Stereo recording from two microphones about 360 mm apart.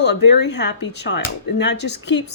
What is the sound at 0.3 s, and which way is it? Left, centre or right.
Speech, left.